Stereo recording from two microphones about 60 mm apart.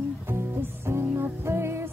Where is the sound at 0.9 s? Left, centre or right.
Right.